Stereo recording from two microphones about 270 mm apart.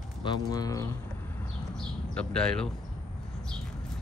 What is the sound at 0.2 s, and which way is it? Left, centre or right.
Speech, centre.